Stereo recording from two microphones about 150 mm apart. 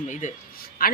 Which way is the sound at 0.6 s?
80° left.